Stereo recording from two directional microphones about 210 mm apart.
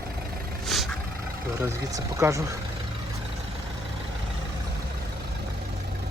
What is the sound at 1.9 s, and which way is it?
Speech, 15° right (ahead or behind).